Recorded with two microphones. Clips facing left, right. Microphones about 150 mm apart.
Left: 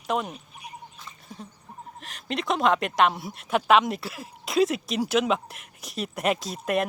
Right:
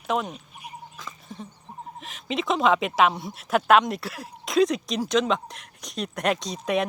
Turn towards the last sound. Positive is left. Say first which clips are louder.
# right 1 dB
turn(degrees=0)  # may be behind; listen again after turning